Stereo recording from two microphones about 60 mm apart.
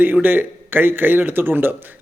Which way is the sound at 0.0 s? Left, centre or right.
Right.